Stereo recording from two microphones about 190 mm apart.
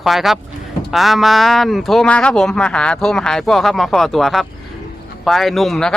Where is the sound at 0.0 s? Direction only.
Centre (ahead or behind).